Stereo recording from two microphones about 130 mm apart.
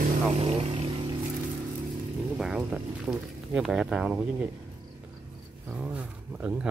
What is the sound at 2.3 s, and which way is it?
Speech, 5° right (ahead or behind).